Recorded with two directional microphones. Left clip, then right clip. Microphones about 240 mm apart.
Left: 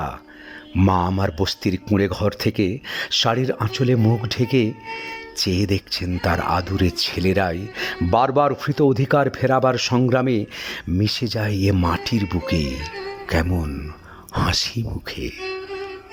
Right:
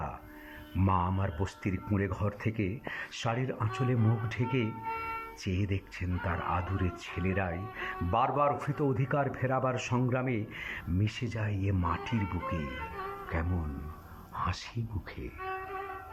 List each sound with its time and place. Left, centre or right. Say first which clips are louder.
0.8 s speech: left 11 dB; left
13.2 s speech: left 14 dB; left